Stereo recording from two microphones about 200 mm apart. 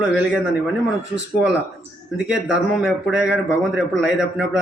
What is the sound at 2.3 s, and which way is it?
Speech, 65° right (ahead or behind).